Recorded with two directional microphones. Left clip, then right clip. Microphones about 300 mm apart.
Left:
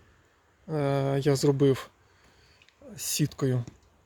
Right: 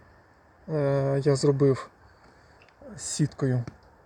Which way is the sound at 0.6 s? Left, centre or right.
Centre.